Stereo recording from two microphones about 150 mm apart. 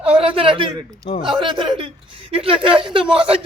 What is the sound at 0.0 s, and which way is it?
A man's voice, 40° right (ahead or behind).